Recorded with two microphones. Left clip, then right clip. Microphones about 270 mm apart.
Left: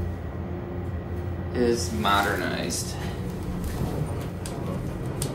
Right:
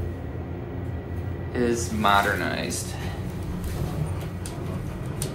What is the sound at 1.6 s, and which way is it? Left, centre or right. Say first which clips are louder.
Speech: even; centre.